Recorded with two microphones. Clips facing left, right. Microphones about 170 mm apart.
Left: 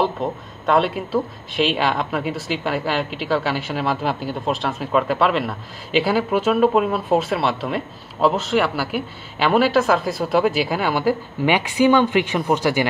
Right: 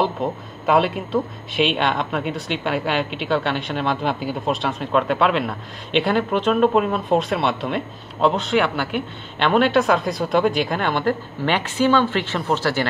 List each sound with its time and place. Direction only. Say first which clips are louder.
0.0 s speech: even; centre (ahead or behind); by 12.8 s 15° left (ahead or behind)